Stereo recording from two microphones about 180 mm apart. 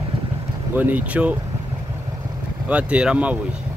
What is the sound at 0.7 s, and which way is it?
Speech, 10° right (ahead or behind).